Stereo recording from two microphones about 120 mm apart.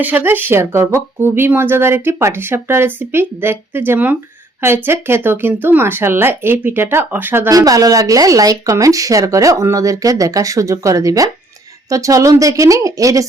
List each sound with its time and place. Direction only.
0.0 s speech: 15° right (ahead or behind)
7.5 s speech: 30° right (ahead or behind)